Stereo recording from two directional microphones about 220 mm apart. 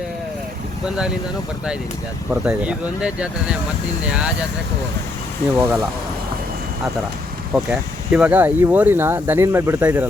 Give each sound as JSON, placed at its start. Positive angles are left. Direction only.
{"t": 0.9, "sound": "speech", "side_deg": -5}
{"t": 2.3, "sound": "speech", "side_deg": -5}
{"t": 5.5, "sound": "speech", "side_deg": -5}
{"t": 7.5, "sound": "speech", "side_deg": -5}